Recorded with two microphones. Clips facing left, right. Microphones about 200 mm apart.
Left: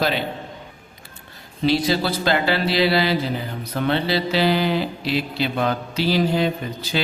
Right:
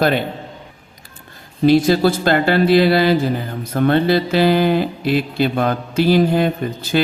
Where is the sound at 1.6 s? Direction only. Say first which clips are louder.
Right 7 dB; 50° right (ahead or behind).